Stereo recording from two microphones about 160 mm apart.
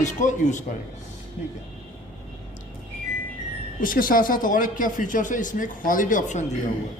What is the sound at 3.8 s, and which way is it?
A man's voice, 60° left (ahead or behind).